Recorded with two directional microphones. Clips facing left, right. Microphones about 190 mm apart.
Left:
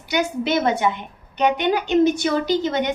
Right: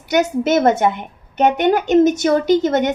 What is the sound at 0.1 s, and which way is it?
Speech, 45° right (ahead or behind).